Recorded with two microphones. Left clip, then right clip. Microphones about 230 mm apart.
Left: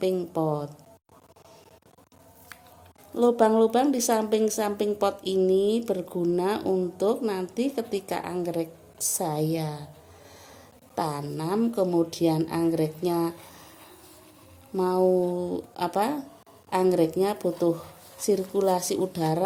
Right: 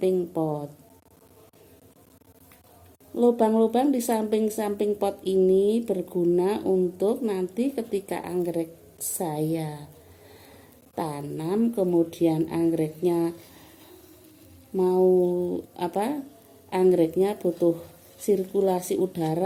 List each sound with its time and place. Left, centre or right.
0.0 s a woman's voice: left
3.2 s a woman's voice: centre
10.9 s a woman's voice: centre
14.8 s a woman's voice: left